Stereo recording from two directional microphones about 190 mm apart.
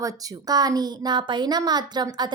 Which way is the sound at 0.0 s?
20° right (ahead or behind).